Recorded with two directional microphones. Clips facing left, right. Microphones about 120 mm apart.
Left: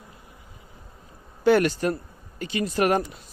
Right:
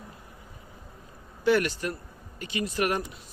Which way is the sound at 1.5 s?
35° left (ahead or behind).